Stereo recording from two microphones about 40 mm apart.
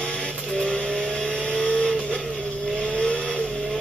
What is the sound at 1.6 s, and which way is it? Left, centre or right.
Vehicle, left.